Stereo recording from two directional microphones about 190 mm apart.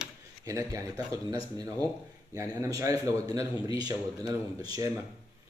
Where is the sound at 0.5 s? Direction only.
15° right (ahead or behind).